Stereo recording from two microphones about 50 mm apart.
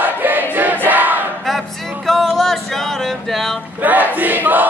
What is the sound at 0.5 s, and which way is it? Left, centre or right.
Music, right.